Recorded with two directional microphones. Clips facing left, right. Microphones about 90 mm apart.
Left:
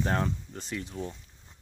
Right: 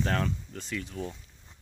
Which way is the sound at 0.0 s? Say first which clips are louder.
Left 1 dB; 20° left (ahead or behind).